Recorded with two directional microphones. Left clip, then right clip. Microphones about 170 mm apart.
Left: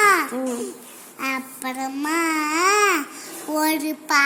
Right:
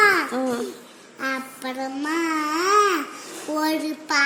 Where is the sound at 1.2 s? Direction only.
15° left (ahead or behind).